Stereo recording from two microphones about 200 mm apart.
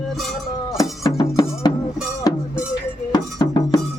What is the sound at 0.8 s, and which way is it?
Music, 20° left (ahead or behind).